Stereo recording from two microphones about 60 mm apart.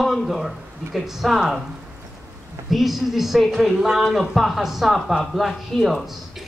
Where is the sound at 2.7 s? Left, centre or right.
Centre.